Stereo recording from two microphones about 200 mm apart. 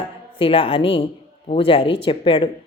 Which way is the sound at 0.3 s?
25° left (ahead or behind).